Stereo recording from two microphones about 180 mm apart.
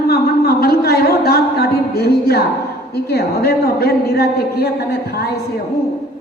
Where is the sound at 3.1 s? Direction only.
65° left (ahead or behind).